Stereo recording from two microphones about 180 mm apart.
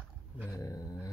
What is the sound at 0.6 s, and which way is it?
Speech, 20° left (ahead or behind).